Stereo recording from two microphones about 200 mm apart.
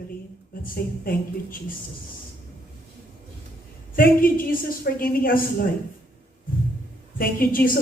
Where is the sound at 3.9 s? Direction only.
45° left (ahead or behind).